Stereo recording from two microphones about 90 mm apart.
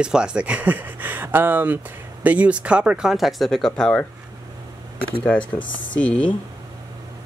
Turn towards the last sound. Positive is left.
turn(degrees=15)  # may be behind; listen again after turning